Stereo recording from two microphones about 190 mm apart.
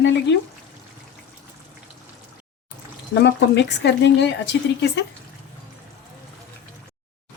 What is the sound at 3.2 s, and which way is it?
Speech, 65° left (ahead or behind).